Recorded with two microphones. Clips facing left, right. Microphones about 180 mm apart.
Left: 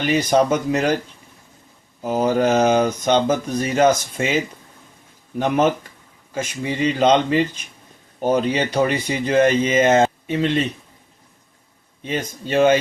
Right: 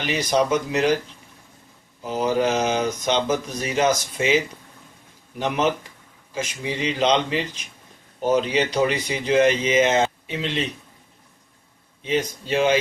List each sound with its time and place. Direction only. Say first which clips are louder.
0.1 s speech: left 3 dB; 50° left (ahead or behind)
2.0 s speech: left 4 dB; 50° left (ahead or behind)
5.4 s speech: left 4 dB; 50° left (ahead or behind)
6.8 s speech: left 5 dB; 50° left (ahead or behind)
12.0 s speech: right 2 dB; 50° left (ahead or behind)